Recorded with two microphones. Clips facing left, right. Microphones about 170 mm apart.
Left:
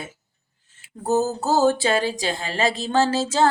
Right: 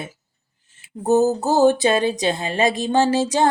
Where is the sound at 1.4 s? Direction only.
15° right (ahead or behind).